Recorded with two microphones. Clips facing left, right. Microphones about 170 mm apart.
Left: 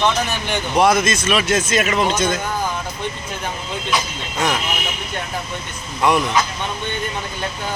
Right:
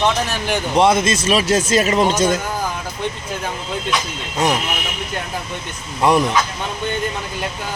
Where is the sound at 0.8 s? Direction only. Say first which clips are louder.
Even; 25° right (ahead or behind).